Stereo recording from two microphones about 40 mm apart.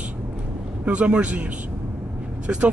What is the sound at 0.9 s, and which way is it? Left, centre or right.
Speech, right.